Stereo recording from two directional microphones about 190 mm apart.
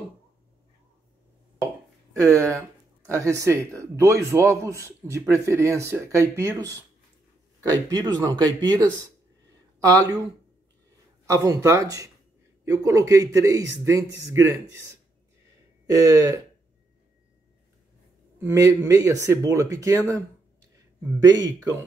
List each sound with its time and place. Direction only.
2.1 s speech: 15° right (ahead or behind)
7.9 s speech: 20° right (ahead or behind)
11.2 s speech: 15° right (ahead or behind)
15.9 s speech: 20° right (ahead or behind)
18.4 s speech: 15° right (ahead or behind)